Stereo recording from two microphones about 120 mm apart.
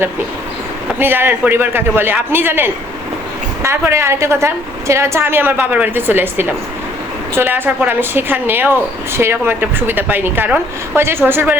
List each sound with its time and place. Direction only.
0.9 s a woman's voice: 15° right (ahead or behind)